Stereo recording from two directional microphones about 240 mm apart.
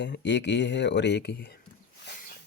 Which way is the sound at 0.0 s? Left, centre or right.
Left.